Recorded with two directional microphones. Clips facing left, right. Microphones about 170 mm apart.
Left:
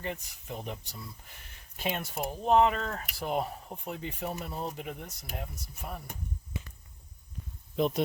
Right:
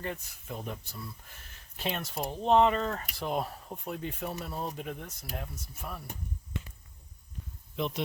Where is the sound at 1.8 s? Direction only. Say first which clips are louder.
Left 1 dB; 10° left (ahead or behind).